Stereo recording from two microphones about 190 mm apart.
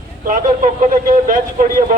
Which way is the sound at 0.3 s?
45° right (ahead or behind).